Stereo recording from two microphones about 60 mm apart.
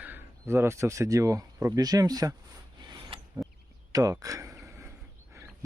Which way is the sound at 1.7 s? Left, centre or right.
Right.